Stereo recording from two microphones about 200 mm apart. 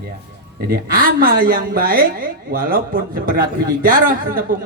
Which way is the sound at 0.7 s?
45° right (ahead or behind).